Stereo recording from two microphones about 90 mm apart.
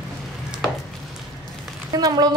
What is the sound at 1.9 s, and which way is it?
Speech, 45° right (ahead or behind).